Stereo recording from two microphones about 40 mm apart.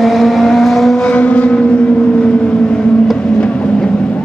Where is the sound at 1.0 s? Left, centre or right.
Left.